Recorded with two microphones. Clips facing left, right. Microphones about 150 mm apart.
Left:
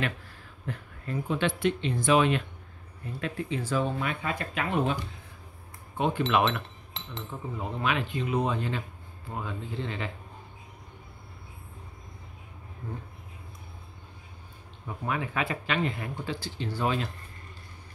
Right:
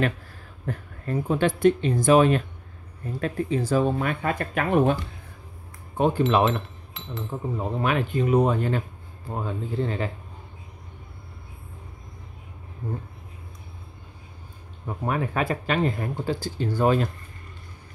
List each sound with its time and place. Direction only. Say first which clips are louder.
0.7 s speech: right 6 dB; 45° right (ahead or behind)
5.9 s speech: right 5 dB; 40° right (ahead or behind)
14.9 s speech: right 5 dB; 45° right (ahead or behind)